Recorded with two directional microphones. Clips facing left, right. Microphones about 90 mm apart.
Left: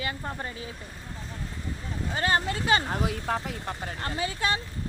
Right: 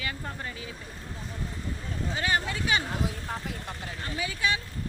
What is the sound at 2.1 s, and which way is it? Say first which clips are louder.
Speech: left 3 dB; 40° left (ahead or behind).